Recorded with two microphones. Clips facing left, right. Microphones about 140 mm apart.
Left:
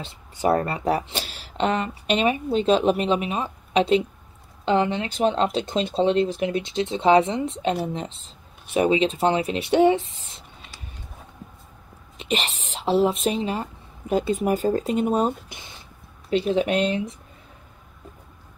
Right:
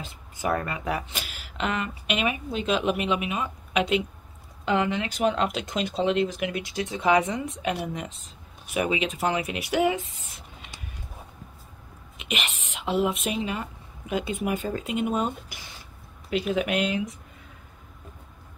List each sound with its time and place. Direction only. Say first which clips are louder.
0.0 s speech: left 6 dB; 35° left (ahead or behind)
12.2 s speech: left 6 dB; 35° left (ahead or behind)